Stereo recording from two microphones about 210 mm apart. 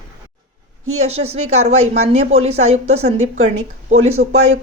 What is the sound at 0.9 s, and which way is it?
Speech, 30° right (ahead or behind).